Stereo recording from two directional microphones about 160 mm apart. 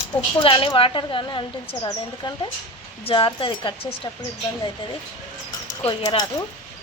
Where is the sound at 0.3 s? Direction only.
30° left (ahead or behind).